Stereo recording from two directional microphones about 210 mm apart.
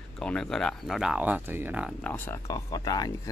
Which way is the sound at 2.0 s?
10° left (ahead or behind).